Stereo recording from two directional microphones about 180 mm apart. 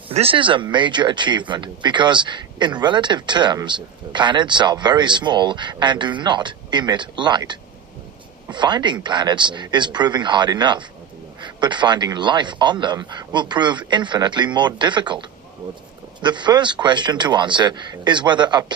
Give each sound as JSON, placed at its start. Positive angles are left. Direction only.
{"t": 0.1, "sound": "speech", "side_deg": -30}
{"t": 16.2, "sound": "speech", "side_deg": -25}